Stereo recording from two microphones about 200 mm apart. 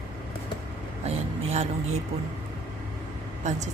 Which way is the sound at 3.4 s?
35° right (ahead or behind).